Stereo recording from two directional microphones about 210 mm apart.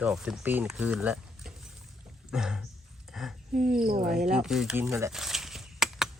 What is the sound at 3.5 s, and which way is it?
Speech, 40° right (ahead or behind).